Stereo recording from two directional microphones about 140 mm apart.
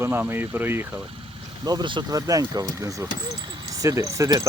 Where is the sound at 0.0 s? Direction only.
15° right (ahead or behind).